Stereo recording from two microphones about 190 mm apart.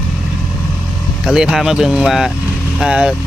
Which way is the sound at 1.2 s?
5° right (ahead or behind).